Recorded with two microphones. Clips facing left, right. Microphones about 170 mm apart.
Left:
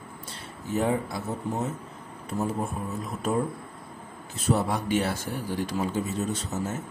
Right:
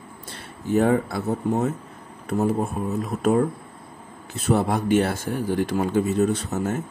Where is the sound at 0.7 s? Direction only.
60° right (ahead or behind).